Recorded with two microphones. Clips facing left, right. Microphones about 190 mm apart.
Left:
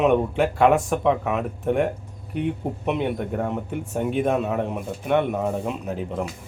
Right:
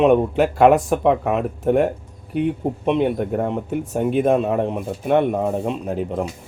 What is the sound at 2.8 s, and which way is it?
A man's voice, 35° right (ahead or behind).